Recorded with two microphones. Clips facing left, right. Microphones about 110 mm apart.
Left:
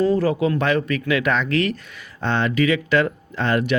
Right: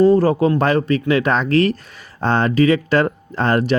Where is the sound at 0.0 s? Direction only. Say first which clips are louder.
Right 5 dB; 35° right (ahead or behind).